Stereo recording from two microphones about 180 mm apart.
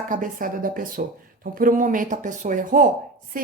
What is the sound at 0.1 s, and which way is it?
Speech, 50° right (ahead or behind).